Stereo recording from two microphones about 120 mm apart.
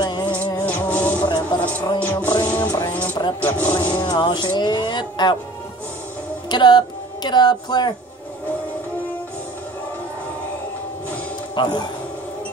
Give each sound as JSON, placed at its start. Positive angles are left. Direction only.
{"t": 0.0, "sound": "music", "side_deg": 40}
{"t": 0.3, "sound": "music", "side_deg": 15}
{"t": 1.2, "sound": "a sound", "side_deg": 35}
{"t": 1.6, "sound": "music", "side_deg": 10}
{"t": 2.4, "sound": "a sound", "side_deg": 10}
{"t": 3.3, "sound": "speech", "side_deg": 10}
{"t": 3.9, "sound": "speech", "side_deg": 40}
{"t": 6.5, "sound": "speech", "side_deg": 40}
{"t": 11.5, "sound": "speech", "side_deg": 35}